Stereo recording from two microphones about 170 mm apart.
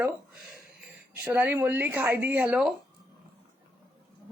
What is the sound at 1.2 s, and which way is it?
A woman's voice, 10° right (ahead or behind).